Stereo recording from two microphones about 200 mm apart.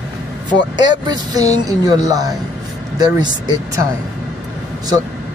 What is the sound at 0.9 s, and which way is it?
Speech, 20° right (ahead or behind).